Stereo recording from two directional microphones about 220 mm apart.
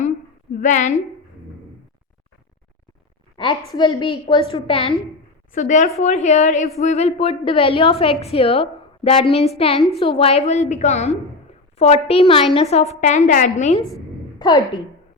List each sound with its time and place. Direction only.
0.5 s a woman's voice: 35° left (ahead or behind)
3.4 s a woman's voice: 20° left (ahead or behind)
14.3 s a woman's voice: 20° left (ahead or behind)